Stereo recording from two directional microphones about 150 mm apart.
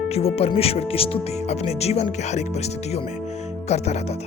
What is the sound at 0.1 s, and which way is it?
Speech, 40° left (ahead or behind).